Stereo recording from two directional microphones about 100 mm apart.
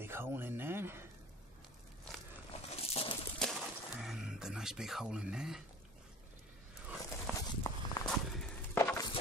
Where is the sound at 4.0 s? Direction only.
5° right (ahead or behind).